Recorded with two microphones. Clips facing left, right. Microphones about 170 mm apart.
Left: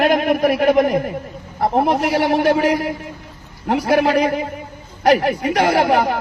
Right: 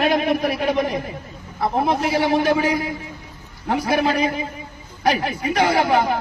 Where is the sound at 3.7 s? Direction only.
80° left.